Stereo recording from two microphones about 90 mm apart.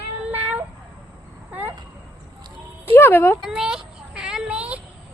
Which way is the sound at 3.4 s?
5° right (ahead or behind).